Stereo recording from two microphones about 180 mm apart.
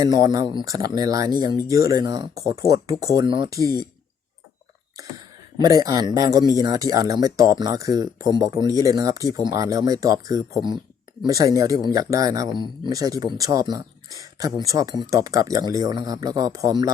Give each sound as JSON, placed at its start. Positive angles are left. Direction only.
{"t": 0.0, "sound": "speech", "side_deg": -20}
{"t": 5.5, "sound": "speech", "side_deg": -20}